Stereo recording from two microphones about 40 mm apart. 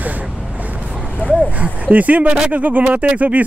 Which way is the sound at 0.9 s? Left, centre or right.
Right.